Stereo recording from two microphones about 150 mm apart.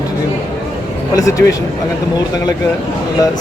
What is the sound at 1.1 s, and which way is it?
Speech, 20° left (ahead or behind).